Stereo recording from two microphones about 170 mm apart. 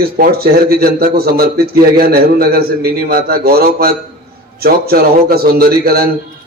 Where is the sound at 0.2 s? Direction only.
60° right (ahead or behind).